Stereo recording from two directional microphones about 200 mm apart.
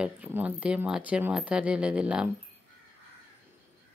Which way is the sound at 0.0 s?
5° right (ahead or behind).